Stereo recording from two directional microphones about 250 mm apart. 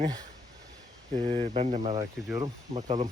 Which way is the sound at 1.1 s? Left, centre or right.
Right.